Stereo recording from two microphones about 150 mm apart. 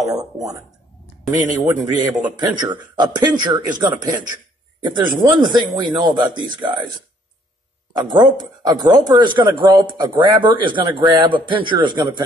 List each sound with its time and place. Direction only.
0.1 s speech: 20° right (ahead or behind)
1.3 s speech: 55° right (ahead or behind)
2.2 s speech: 30° right (ahead or behind)
8.1 s speech: 30° right (ahead or behind)